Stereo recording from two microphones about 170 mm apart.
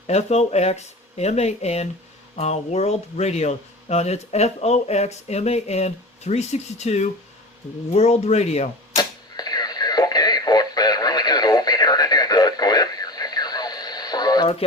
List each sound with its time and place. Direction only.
0.1 s speech: 40° left (ahead or behind)
9.0 s radio: 25° left (ahead or behind)